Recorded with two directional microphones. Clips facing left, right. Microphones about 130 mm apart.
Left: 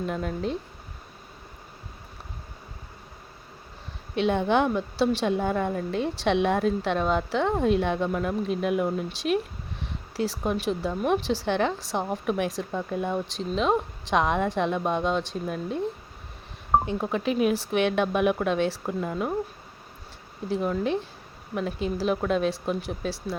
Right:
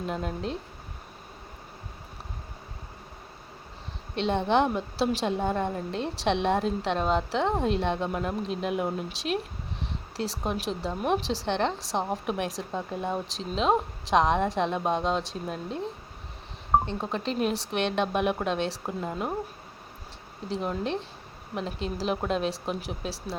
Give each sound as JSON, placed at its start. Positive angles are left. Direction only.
{"t": 0.0, "sound": "a woman's voice", "side_deg": 0}
{"t": 4.1, "sound": "a woman's voice", "side_deg": 5}
{"t": 16.8, "sound": "a woman's voice", "side_deg": 5}
{"t": 20.5, "sound": "a woman's voice", "side_deg": 0}
{"t": 23.1, "sound": "speech", "side_deg": -30}